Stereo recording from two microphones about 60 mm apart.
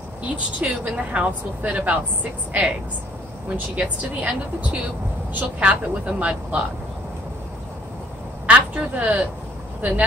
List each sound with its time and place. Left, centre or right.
0.6 s a woman's voice: centre
3.4 s a woman's voice: right
8.5 s a sound: right
9.8 s speech: right